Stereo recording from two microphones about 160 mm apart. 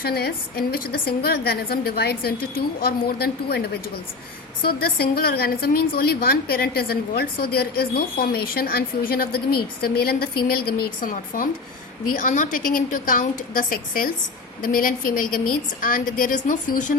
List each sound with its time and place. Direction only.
0.0 s a woman's voice: 75° left (ahead or behind); by 16.9 s 55° left (ahead or behind)